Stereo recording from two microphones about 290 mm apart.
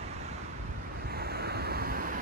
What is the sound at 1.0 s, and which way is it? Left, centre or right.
Waves, right.